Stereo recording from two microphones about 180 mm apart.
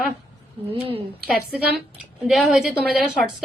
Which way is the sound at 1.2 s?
5° right (ahead or behind).